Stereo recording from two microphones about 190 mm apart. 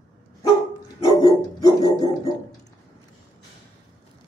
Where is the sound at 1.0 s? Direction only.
20° left (ahead or behind).